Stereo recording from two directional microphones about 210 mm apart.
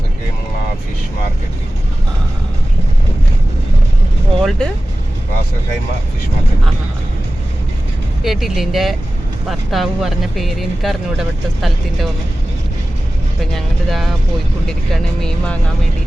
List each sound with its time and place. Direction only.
4.4 s speech: centre (ahead or behind)
8.2 s speech: centre (ahead or behind)
13.4 s speech: centre (ahead or behind)